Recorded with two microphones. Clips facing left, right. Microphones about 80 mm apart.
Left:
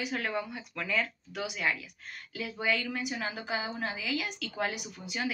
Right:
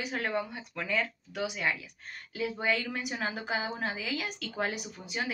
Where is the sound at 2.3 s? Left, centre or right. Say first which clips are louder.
Right 1 dB; right.